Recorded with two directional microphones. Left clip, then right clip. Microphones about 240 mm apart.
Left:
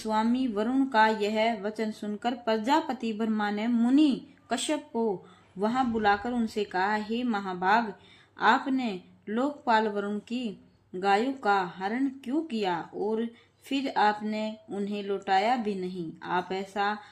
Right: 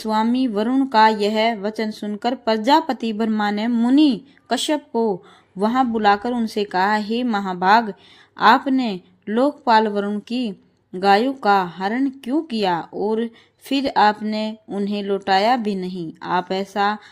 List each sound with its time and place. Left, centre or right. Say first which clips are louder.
0.0 s speech: right 8 dB; right